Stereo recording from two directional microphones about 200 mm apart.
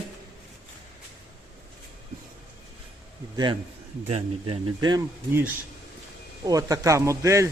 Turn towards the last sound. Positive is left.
turn(degrees=-15)  # may be behind; listen again after turning